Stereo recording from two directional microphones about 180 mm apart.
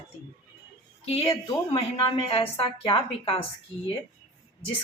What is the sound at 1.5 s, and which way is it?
Speech, 20° left (ahead or behind).